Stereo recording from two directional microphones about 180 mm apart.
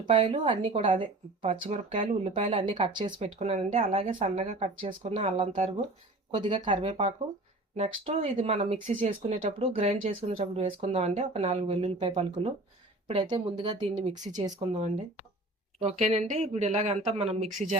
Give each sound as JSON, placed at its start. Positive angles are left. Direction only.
{"t": 0.0, "sound": "speech", "side_deg": -30}
{"t": 6.4, "sound": "speech", "side_deg": -25}
{"t": 14.0, "sound": "speech", "side_deg": -45}
{"t": 15.8, "sound": "speech", "side_deg": -35}